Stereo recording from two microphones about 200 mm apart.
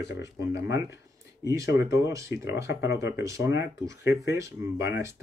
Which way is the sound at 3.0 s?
15° right (ahead or behind).